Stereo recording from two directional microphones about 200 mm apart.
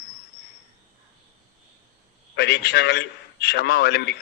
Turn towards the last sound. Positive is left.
turn(degrees=55)  # may be behind; listen again after turning